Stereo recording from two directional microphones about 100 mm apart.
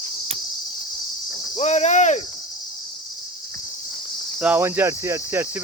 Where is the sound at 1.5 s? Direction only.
90° left.